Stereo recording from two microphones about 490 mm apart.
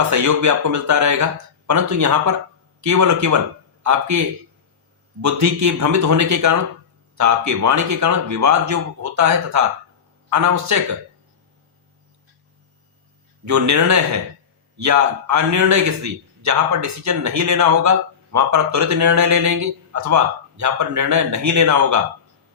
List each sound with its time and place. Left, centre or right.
0.1 s a man's voice: right
5.2 s a man's voice: right
13.4 s a man's voice: right